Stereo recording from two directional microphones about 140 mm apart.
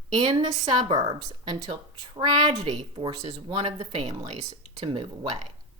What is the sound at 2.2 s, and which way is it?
Speech, 35° right (ahead or behind).